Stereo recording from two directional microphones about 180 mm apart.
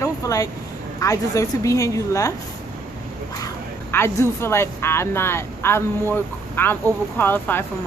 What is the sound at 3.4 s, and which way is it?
Speech, 15° left (ahead or behind).